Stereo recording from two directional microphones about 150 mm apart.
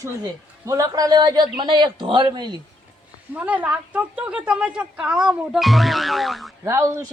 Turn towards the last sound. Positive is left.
turn(degrees=-20)  # may be behind; listen again after turning